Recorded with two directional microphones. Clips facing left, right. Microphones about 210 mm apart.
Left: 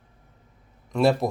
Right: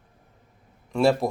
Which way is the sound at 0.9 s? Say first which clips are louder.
Even; centre (ahead or behind).